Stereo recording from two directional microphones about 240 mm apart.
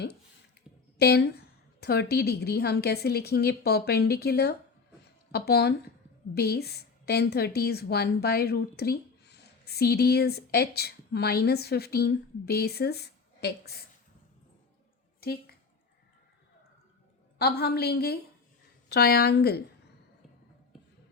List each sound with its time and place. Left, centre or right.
0.9 s a woman's voice: left
15.2 s a sound: left
17.3 s a woman's voice: left